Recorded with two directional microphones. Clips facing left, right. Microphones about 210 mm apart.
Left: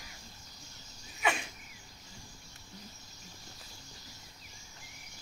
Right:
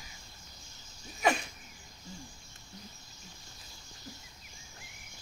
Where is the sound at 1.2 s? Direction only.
40° right (ahead or behind).